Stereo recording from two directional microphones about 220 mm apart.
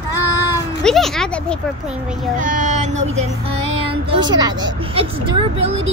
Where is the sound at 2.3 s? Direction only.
35° right (ahead or behind).